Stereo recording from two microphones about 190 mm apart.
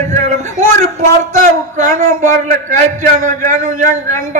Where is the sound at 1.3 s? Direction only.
40° right (ahead or behind).